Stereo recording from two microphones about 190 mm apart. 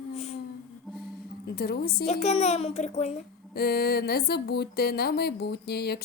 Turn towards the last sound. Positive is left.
turn(degrees=55)  # may be behind; listen again after turning